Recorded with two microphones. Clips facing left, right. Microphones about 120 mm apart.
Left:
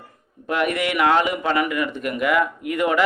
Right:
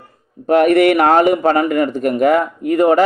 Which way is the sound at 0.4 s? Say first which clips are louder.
Right 12 dB; 40° right (ahead or behind).